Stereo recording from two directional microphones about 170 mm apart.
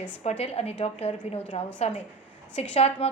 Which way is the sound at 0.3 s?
35° left (ahead or behind).